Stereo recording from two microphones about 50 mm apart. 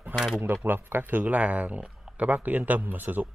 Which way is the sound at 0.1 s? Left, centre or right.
Right.